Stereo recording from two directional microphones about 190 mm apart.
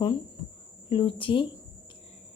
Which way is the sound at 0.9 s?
25° left (ahead or behind).